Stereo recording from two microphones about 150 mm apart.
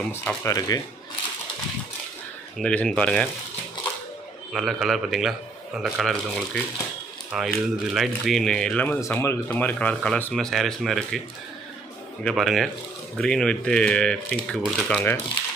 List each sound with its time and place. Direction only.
0.1 s speech: 10° left (ahead or behind)
0.5 s speech: 25° left (ahead or behind)
2.6 s speech: 10° left (ahead or behind)
4.5 s speech: centre (ahead or behind)
12.2 s speech: 5° left (ahead or behind)